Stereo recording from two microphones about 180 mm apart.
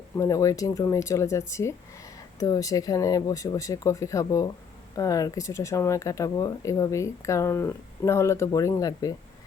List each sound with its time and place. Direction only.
0.2 s speech: 15° left (ahead or behind)